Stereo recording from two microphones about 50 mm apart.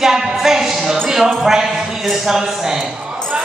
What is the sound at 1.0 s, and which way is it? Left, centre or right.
Speech, centre.